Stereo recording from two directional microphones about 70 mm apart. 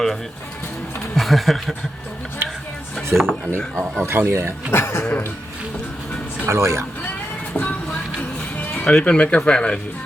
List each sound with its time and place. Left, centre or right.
1.1 s speech: centre
2.4 s a sound: right
3.1 s speech: centre
3.8 s speech: right
4.7 s speech: left
6.5 s speech: right
7.5 s music: left
8.5 s speech: centre